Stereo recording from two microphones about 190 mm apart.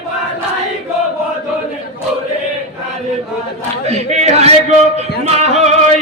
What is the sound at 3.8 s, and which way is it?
A man's voice, 35° right (ahead or behind).